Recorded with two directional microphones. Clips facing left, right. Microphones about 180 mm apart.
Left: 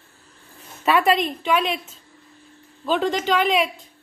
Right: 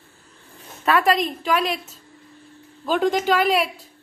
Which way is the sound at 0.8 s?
Centre (ahead or behind).